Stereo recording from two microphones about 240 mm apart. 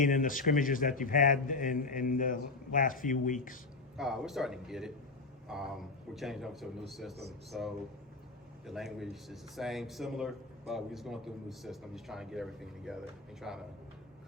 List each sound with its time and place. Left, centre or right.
0.0 s speech: left
3.9 s speech: centre